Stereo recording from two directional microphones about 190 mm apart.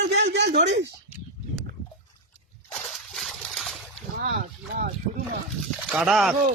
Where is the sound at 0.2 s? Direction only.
65° right (ahead or behind).